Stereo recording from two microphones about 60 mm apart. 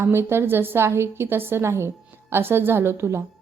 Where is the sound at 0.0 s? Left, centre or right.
Right.